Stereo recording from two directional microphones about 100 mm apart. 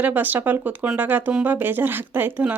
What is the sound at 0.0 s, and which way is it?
Speech, 20° right (ahead or behind).